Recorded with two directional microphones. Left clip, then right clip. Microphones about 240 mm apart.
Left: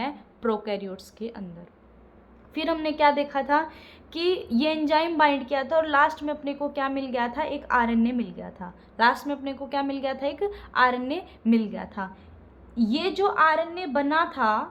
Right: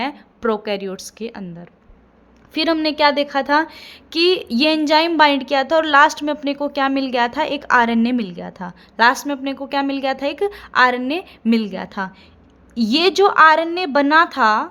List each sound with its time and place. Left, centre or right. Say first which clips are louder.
0.0 s a woman's voice: right 7 dB; right
2.6 s a woman's voice: right 7 dB; right